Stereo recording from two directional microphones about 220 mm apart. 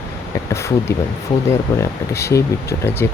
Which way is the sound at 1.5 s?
10° left (ahead or behind).